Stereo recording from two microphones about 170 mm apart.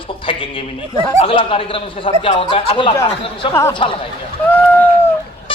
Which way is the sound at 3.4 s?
20° left (ahead or behind).